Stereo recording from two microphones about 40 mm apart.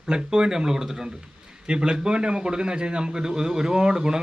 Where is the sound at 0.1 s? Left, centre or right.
Centre.